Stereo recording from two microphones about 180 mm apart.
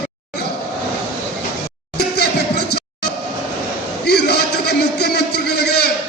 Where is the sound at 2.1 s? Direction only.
65° left (ahead or behind).